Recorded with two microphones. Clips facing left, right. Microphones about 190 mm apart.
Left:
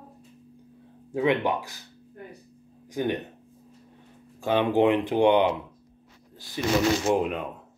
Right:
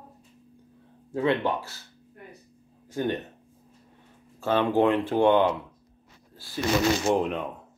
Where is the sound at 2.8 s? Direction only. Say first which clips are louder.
Left 1 dB; 15° left (ahead or behind).